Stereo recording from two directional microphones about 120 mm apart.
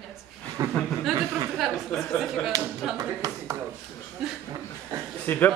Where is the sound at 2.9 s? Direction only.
30° right (ahead or behind).